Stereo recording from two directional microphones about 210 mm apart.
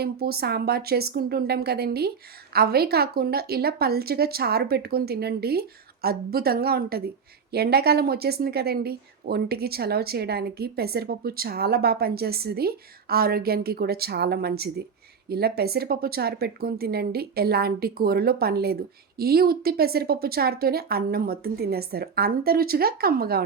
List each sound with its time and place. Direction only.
0.0 s a woman's voice: 50° right (ahead or behind)